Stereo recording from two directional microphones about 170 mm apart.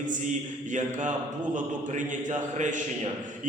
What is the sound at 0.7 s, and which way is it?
A man's voice, 45° right (ahead or behind).